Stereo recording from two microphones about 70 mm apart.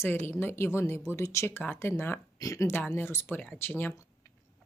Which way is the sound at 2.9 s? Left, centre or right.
Left.